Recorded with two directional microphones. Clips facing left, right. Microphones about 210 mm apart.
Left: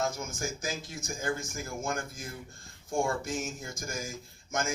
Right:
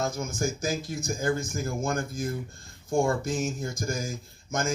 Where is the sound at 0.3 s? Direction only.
35° right (ahead or behind).